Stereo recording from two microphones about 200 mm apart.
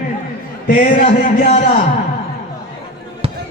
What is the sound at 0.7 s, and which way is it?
Speech, 40° left (ahead or behind).